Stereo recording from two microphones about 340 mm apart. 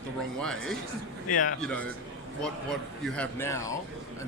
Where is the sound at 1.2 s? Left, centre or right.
Left.